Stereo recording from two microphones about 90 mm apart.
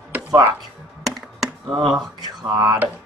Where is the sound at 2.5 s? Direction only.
50° right (ahead or behind).